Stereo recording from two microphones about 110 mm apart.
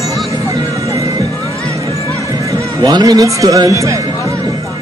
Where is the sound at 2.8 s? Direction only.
40° right (ahead or behind).